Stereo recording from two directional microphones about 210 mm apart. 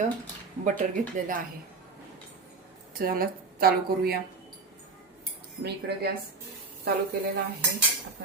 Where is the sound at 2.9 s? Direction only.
45° right (ahead or behind).